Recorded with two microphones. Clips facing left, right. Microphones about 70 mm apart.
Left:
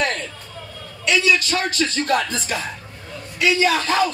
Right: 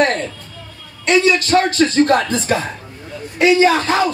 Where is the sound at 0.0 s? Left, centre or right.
Right.